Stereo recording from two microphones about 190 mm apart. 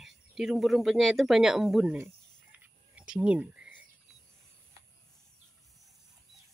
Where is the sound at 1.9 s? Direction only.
10° right (ahead or behind).